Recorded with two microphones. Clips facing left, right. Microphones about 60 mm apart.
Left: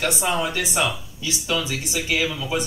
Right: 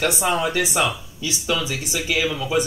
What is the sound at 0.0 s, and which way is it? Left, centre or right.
Speech, centre.